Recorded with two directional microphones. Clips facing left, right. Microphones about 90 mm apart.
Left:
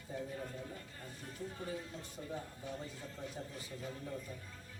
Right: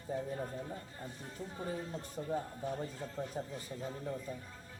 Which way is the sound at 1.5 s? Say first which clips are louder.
Right 7 dB; 35° right (ahead or behind).